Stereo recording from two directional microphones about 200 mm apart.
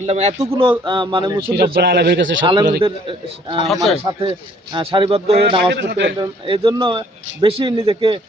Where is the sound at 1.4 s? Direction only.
50° right (ahead or behind); by 2.4 s 65° right (ahead or behind).